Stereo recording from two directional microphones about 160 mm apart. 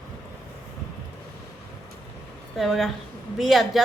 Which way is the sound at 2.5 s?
Centre (ahead or behind).